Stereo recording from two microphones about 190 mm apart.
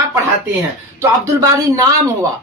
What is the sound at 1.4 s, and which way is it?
Speech, 20° right (ahead or behind).